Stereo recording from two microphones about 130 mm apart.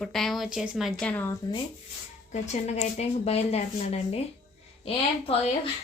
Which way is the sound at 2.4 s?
60° left (ahead or behind).